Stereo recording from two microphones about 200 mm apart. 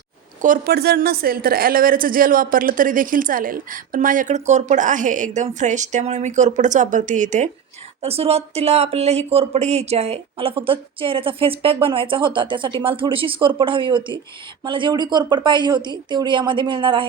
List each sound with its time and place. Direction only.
0.4 s a woman's voice: 45° right (ahead or behind); by 17.1 s 25° right (ahead or behind)